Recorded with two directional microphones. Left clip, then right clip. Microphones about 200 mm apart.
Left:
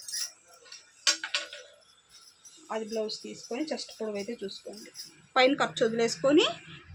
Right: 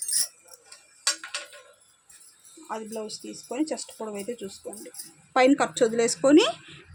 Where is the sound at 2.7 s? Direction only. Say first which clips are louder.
Left 1 dB; 40° right (ahead or behind).